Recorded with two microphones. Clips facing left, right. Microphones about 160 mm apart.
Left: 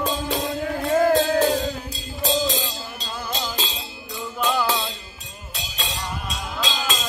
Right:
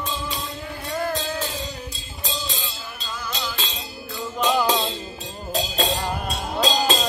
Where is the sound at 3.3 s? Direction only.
20° left (ahead or behind).